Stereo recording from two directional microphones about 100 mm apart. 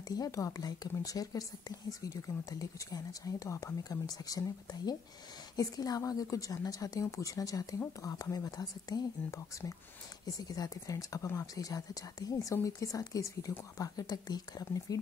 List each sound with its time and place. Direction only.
0.1 s speech: 35° left (ahead or behind)